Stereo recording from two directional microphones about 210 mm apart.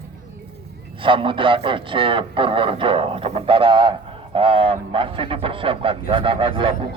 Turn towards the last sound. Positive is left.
turn(degrees=-25)  # may be behind; listen again after turning